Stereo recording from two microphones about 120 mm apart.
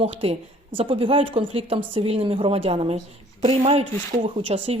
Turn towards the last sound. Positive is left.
turn(degrees=-50)  # may be behind; listen again after turning